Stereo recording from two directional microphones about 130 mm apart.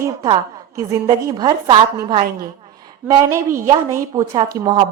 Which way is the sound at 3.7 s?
25° right (ahead or behind).